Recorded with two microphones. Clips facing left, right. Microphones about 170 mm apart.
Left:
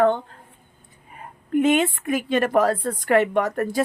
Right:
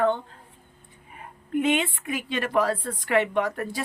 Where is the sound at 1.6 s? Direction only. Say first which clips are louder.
Left 5 dB; 45° left (ahead or behind).